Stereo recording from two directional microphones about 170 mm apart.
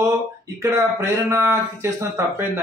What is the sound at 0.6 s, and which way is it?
Speech, 15° right (ahead or behind).